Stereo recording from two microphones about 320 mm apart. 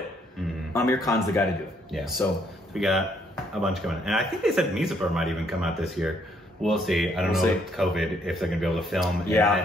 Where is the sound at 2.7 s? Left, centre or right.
Centre.